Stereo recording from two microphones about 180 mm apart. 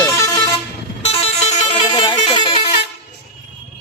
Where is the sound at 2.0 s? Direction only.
25° left (ahead or behind).